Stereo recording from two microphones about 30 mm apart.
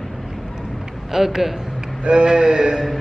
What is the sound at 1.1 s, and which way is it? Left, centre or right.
Speech, centre.